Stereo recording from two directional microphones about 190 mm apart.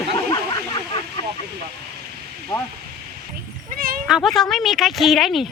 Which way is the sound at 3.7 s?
50° right (ahead or behind).